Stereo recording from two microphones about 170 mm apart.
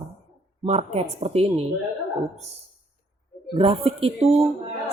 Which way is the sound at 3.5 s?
35° right (ahead or behind).